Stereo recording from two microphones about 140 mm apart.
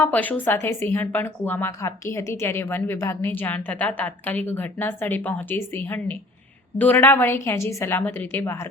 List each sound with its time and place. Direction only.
0.0 s a woman's voice: 10° left (ahead or behind)